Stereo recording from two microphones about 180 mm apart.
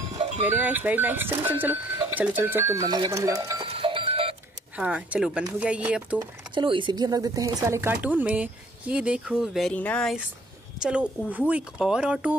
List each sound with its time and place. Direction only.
0.5 s speech: 10° right (ahead or behind)
3.6 s livestock: 30° right (ahead or behind)
4.7 s speech: 5° right (ahead or behind)
6.1 s speech: 25° right (ahead or behind); by 10.1 s 5° left (ahead or behind)
10.8 s a woman's voice: 5° right (ahead or behind)